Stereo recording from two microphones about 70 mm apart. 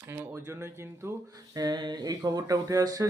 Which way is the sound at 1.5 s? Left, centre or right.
Right.